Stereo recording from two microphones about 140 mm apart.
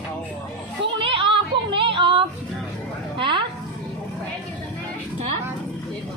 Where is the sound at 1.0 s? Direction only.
40° right (ahead or behind).